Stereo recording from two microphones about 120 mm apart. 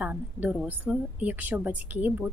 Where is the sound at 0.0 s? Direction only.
10° right (ahead or behind).